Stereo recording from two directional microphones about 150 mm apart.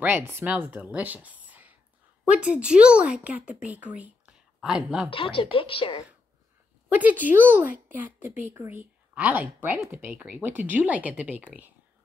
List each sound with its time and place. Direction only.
0.0 s a woman's voice: 10° right (ahead or behind)
5.1 s speech: 35° left (ahead or behind)
6.9 s speech: 10° right (ahead or behind)